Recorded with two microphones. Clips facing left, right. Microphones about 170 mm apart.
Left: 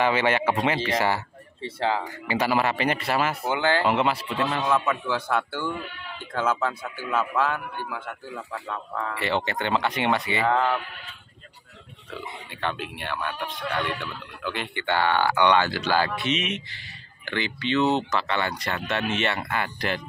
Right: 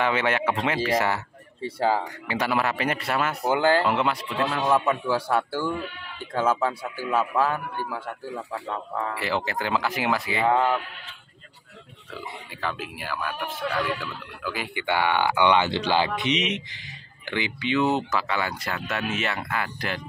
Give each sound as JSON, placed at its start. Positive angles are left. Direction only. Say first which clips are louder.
{"t": 0.0, "sound": "speech", "louder": "left 2 dB", "side_deg": 0}
{"t": 3.4, "sound": "a man's voice", "louder": "right 6 dB", "side_deg": -40}
{"t": 3.8, "sound": "speech", "louder": "left 1 dB", "side_deg": 5}
{"t": 4.6, "sound": "speech", "louder": "right 2 dB", "side_deg": -15}
{"t": 7.4, "sound": "a man's voice", "louder": "right 1 dB", "side_deg": -40}
{"t": 8.4, "sound": "speech", "louder": "right 1 dB", "side_deg": -15}
{"t": 9.1, "sound": "speech", "louder": "left 4 dB", "side_deg": 0}
{"t": 12.1, "sound": "speech", "louder": "left 1 dB", "side_deg": 0}